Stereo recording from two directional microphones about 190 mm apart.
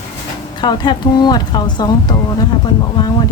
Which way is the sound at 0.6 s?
20° left (ahead or behind).